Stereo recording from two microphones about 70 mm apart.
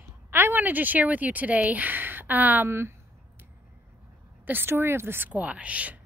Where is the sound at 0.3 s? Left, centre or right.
Right.